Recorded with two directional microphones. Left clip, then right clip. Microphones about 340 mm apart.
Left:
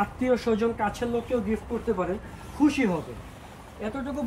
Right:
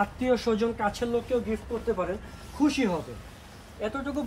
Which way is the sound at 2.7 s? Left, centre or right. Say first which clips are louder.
Left 2 dB; centre.